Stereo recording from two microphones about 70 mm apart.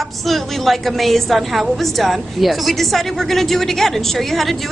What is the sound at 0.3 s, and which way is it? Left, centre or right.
A woman's voice, centre.